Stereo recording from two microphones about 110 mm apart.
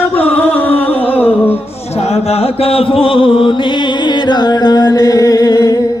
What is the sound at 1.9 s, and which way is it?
Mantra, 70° left (ahead or behind).